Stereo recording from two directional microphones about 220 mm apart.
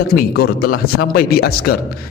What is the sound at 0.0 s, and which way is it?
A man's voice, 45° left (ahead or behind).